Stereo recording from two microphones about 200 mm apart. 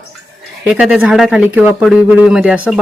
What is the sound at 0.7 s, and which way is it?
Speech, 5° right (ahead or behind).